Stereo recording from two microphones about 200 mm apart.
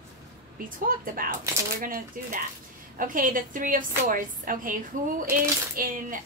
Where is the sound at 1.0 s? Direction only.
45° right (ahead or behind).